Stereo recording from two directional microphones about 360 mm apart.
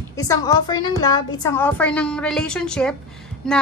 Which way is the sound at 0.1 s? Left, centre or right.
Centre.